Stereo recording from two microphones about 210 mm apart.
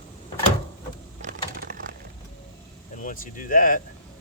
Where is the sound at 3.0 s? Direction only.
40° left (ahead or behind).